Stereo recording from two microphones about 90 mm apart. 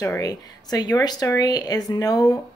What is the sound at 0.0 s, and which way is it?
Speech, 35° left (ahead or behind).